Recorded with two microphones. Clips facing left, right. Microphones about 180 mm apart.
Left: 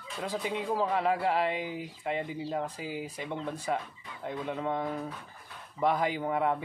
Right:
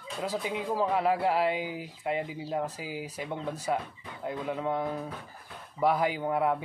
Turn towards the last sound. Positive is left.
turn(degrees=-5)  # may be behind; listen again after turning